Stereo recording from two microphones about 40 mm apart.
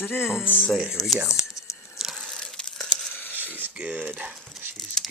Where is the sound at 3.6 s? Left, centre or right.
Right.